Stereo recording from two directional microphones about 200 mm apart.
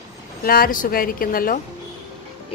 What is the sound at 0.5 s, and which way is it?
Speech, 45° left (ahead or behind).